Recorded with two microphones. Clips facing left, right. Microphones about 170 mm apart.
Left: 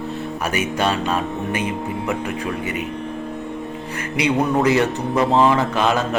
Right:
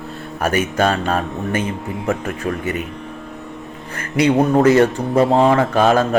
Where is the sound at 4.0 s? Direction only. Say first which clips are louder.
Right 5 dB; 50° right (ahead or behind).